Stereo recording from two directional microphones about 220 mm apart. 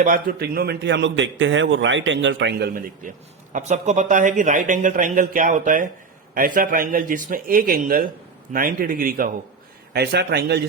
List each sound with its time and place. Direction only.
0.0 s a man's voice: 40° right (ahead or behind)
3.5 s a man's voice: 30° right (ahead or behind); by 10.6 s 50° right (ahead or behind)